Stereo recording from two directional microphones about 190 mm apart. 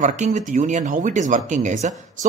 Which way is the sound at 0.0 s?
40° right (ahead or behind).